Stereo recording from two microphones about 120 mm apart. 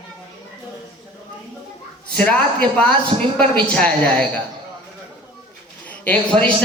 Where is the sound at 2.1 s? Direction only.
10° left (ahead or behind).